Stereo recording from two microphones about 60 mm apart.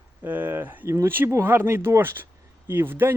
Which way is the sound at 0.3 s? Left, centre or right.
Right.